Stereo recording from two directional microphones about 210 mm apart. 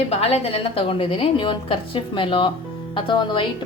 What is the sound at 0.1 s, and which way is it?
A woman's voice, 30° left (ahead or behind).